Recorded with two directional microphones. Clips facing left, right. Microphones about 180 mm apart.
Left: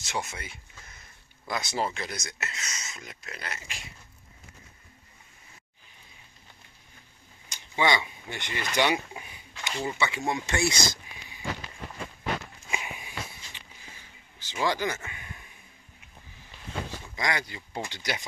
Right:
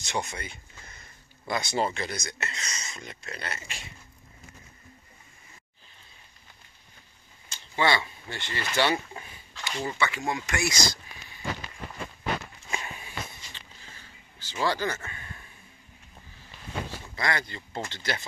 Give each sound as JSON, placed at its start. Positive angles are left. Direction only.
{"t": 0.0, "sound": "speech", "side_deg": 5}
{"t": 7.4, "sound": "speech", "side_deg": 15}
{"t": 12.7, "sound": "a sound", "side_deg": 15}
{"t": 17.1, "sound": "speech", "side_deg": 15}